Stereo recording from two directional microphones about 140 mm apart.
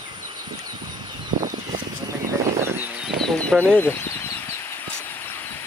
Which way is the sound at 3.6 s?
15° left (ahead or behind).